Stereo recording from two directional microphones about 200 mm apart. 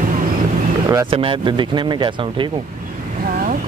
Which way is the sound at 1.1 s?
25° right (ahead or behind).